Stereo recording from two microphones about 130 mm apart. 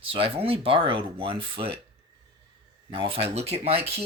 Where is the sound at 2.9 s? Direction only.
45° right (ahead or behind).